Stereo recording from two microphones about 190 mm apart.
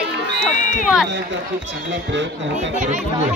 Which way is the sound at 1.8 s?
75° right (ahead or behind).